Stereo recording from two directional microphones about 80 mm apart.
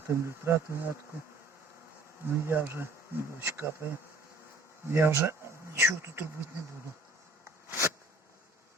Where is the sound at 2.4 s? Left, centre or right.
Right.